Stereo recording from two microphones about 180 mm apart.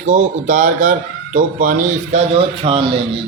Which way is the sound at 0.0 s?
40° right (ahead or behind).